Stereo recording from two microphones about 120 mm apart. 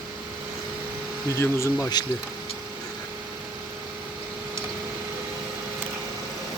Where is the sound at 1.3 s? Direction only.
25° left (ahead or behind).